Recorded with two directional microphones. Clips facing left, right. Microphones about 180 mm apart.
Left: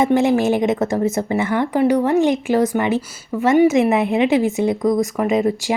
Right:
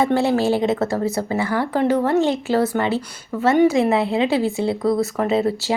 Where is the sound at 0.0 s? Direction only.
15° left (ahead or behind).